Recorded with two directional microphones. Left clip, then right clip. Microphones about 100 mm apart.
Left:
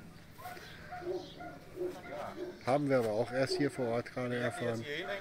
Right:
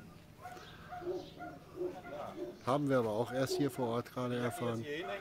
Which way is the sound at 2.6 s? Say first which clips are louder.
Left 2 dB; 25° right (ahead or behind).